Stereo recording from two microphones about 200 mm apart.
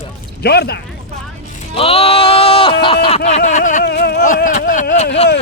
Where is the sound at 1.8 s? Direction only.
30° left (ahead or behind).